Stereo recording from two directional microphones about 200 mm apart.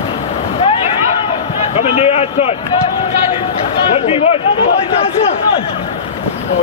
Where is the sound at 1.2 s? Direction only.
25° left (ahead or behind).